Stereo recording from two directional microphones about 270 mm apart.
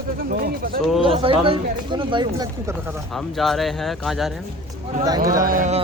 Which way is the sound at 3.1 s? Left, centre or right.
Centre.